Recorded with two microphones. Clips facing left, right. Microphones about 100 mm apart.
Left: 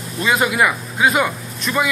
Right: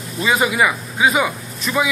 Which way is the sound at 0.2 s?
Centre (ahead or behind).